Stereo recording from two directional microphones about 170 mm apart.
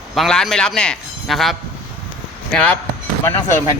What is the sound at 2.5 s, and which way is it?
Speech, 10° left (ahead or behind).